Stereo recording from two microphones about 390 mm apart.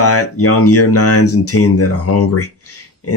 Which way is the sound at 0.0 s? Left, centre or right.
Left.